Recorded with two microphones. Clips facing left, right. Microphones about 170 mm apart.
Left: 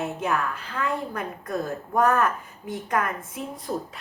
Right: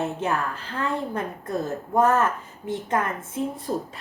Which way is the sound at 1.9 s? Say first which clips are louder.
Right 1 dB; 20° right (ahead or behind).